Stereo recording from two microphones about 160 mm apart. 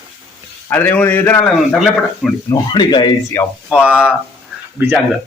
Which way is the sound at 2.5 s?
25° left (ahead or behind).